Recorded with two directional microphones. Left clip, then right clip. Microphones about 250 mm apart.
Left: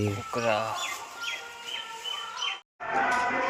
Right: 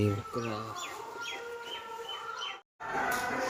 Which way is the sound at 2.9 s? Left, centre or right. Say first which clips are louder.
Left 6 dB; left.